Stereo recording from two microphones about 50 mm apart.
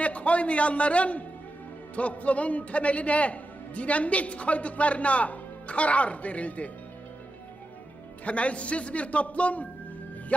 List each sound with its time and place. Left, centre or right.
0.0 s a man's voice: left
8.2 s a man's voice: left